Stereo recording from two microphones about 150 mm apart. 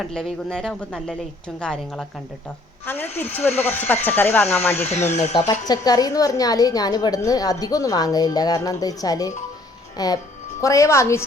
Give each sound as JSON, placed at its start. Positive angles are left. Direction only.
{"t": 0.0, "sound": "speech", "side_deg": 5}
{"t": 4.9, "sound": "speech", "side_deg": 50}
{"t": 5.5, "sound": "a woman's voice", "side_deg": 25}